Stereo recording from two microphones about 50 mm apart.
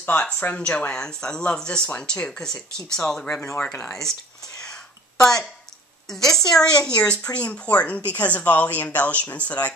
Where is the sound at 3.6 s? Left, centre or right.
Left.